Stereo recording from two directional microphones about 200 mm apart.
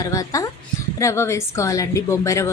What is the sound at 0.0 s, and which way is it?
A woman's voice, 15° left (ahead or behind).